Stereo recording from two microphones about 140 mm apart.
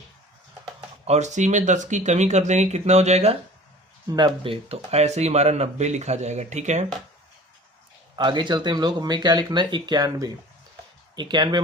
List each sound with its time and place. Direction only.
1.0 s speech: 55° right (ahead or behind)
4.1 s speech: 35° right (ahead or behind); by 6.8 s 55° right (ahead or behind)
8.1 s speech: 35° right (ahead or behind)